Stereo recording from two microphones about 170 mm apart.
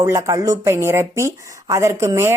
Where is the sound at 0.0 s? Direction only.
15° right (ahead or behind).